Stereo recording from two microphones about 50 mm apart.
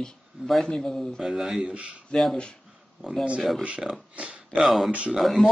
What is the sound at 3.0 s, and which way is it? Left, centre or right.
Speech, centre.